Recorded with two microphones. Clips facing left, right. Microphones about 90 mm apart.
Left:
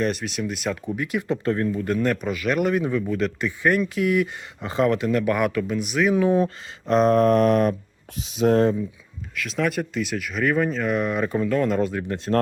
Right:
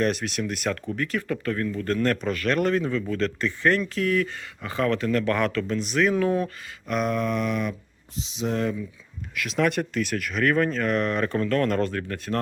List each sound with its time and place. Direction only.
0.0 s speech: centre (ahead or behind)
0.9 s speech: 15° left (ahead or behind)
1.8 s speech: 10° left (ahead or behind)
6.2 s speech: 25° left (ahead or behind); by 8.6 s 50° left (ahead or behind)
9.3 s speech: centre (ahead or behind); by 12.3 s 20° left (ahead or behind)